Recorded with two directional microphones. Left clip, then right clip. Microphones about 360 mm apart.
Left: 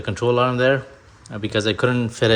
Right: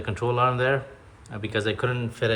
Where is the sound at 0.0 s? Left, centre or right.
Centre.